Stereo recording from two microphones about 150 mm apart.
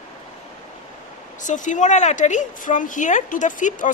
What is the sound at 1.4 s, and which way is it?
A woman's voice, 55° left (ahead or behind).